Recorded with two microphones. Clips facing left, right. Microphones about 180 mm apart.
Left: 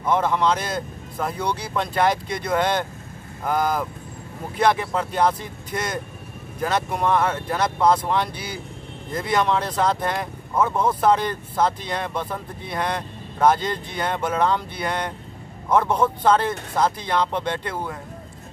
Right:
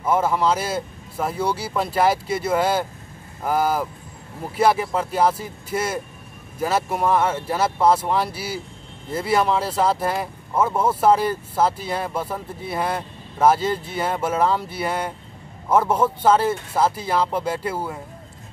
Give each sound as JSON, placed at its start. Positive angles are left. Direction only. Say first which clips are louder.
{"t": 0.0, "sound": "speech", "louder": "right 1 dB", "side_deg": -5}